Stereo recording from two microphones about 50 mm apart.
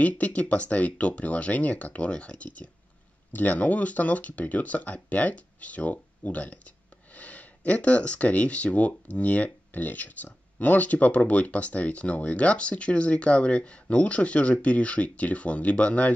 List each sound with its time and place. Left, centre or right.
0.0 s speech: left